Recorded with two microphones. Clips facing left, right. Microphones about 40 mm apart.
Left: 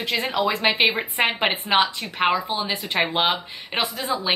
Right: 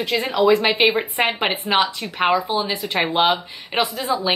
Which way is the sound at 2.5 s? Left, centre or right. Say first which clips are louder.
Right 2 dB; centre.